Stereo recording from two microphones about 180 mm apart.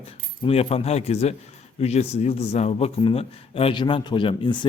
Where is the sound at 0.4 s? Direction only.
35° left (ahead or behind).